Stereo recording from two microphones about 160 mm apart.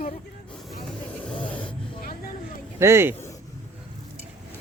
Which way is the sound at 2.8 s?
15° right (ahead or behind).